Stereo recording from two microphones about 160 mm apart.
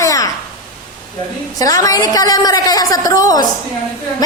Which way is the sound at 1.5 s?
20° left (ahead or behind).